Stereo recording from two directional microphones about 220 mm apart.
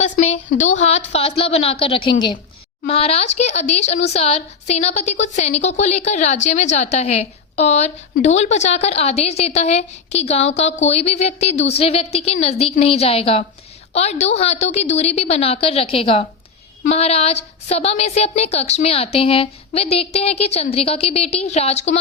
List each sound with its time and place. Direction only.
0.0 s speech: 30° left (ahead or behind)